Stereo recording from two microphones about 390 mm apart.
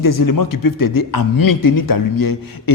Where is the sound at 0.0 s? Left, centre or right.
Left.